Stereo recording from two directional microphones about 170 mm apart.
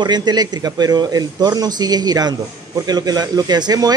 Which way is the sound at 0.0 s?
25° right (ahead or behind).